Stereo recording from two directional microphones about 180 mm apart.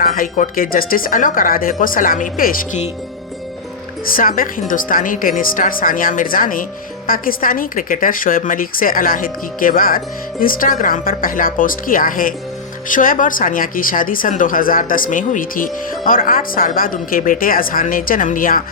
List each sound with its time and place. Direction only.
0.0 s speech: 50° left (ahead or behind)
4.0 s speech: 50° left (ahead or behind)